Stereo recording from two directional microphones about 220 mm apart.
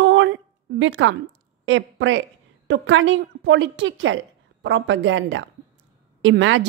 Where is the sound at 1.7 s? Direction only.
60° right (ahead or behind).